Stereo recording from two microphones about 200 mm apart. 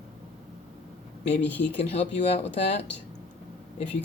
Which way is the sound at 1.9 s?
30° left (ahead or behind).